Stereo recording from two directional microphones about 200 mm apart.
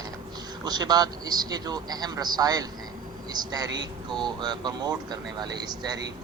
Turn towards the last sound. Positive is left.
turn(degrees=-20)  # may be behind; listen again after turning